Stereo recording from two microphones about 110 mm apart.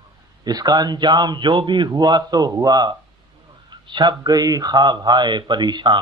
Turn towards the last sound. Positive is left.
turn(degrees=-40)  # may be behind; listen again after turning